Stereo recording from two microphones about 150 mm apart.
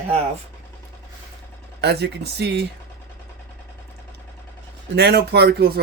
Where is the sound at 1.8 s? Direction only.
90° right.